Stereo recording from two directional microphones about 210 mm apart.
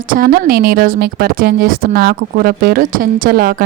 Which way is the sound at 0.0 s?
45° right (ahead or behind).